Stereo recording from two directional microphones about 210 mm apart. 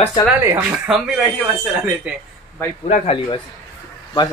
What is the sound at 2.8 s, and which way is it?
Speech, 30° left (ahead or behind).